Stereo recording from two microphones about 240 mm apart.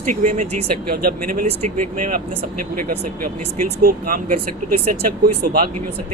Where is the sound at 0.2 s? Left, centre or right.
Right.